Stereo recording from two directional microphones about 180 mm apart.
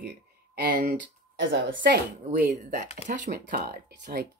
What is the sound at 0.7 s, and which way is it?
Speech, 50° right (ahead or behind).